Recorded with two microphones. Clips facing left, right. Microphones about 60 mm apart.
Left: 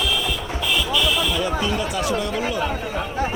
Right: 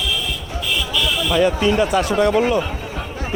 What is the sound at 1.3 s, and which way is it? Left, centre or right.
Speech, right.